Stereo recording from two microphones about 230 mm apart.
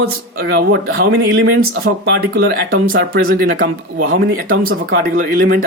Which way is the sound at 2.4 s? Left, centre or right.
Right.